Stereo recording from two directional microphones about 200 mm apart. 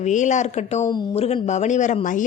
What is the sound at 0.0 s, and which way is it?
Speech, 35° left (ahead or behind).